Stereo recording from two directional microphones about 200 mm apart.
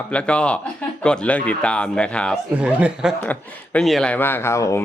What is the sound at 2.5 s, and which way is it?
Speech, 5° right (ahead or behind).